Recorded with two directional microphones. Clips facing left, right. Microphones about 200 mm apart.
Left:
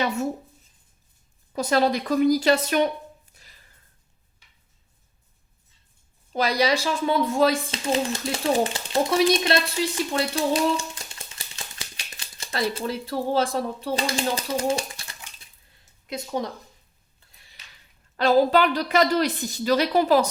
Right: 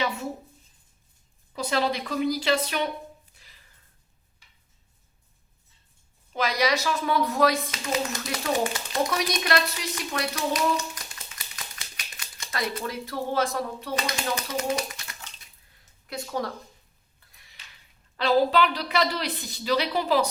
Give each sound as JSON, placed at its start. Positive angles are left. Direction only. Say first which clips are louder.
{"t": 1.5, "sound": "a woman's voice", "louder": "left 5 dB", "side_deg": 45}
{"t": 6.3, "sound": "speech", "louder": "left 3 dB", "side_deg": 30}
{"t": 16.0, "sound": "speech", "louder": "left 2 dB", "side_deg": 20}
{"t": 18.2, "sound": "a woman's voice", "louder": "left 3 dB", "side_deg": 45}